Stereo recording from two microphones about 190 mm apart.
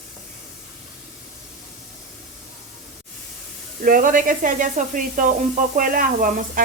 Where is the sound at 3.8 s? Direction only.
45° right (ahead or behind).